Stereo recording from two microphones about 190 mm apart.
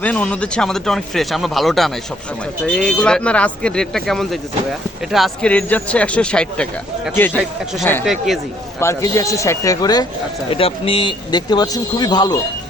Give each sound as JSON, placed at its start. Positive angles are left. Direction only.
{"t": 0.0, "sound": "speech", "side_deg": 5}
{"t": 8.8, "sound": "speech", "side_deg": 15}